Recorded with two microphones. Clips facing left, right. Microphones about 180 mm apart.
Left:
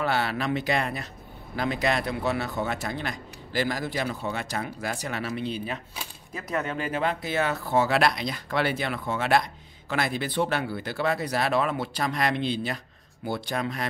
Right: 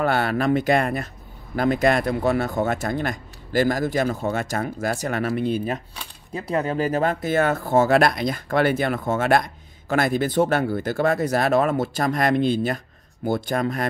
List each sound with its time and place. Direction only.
0.0 s speech: 50° right (ahead or behind)
6.3 s speech: 30° right (ahead or behind); by 13.8 s 50° right (ahead or behind)